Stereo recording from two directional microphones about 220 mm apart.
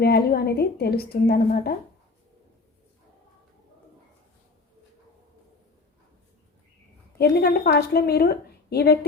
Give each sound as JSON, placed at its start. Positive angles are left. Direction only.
{"t": 0.0, "sound": "a woman's voice", "side_deg": 45}
{"t": 7.2, "sound": "a woman's voice", "side_deg": 45}